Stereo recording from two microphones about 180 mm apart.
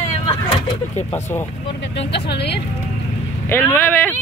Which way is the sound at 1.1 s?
10° left (ahead or behind).